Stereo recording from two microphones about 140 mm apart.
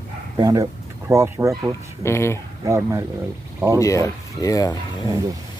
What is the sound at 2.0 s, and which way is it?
Speech, 20° left (ahead or behind).